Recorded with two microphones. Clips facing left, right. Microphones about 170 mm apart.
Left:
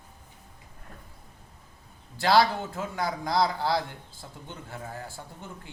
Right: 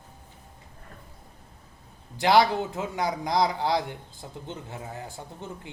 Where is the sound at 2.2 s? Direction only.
20° right (ahead or behind).